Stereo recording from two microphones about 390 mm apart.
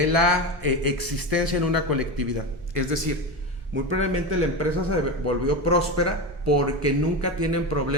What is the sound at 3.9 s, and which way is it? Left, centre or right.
A man's voice, right.